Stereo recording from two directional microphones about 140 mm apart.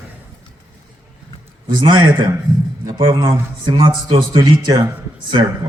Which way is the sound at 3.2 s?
20° right (ahead or behind).